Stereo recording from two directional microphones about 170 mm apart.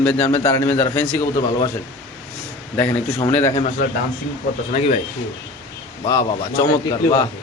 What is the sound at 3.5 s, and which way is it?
Speech, 45° left (ahead or behind).